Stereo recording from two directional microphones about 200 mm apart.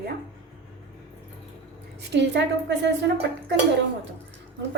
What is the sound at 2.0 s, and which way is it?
Speech, 60° right (ahead or behind).